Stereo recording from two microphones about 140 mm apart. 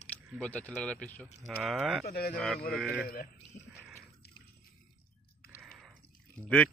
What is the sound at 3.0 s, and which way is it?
Speech, 90° left.